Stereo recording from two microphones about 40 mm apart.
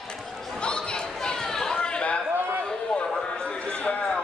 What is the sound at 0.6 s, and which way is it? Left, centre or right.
Chatter, left.